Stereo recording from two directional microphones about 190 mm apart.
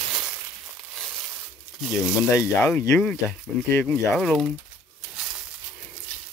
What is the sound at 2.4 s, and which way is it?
Speech, 15° left (ahead or behind).